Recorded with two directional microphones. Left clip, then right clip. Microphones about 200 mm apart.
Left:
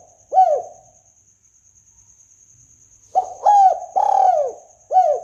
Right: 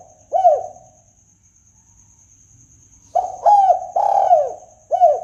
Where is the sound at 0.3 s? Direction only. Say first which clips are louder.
Even; 20° left (ahead or behind).